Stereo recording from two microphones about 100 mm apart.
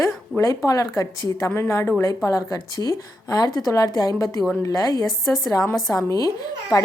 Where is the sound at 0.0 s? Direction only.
30° left (ahead or behind).